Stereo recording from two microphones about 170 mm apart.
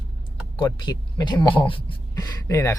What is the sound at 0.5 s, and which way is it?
Speech, 25° left (ahead or behind).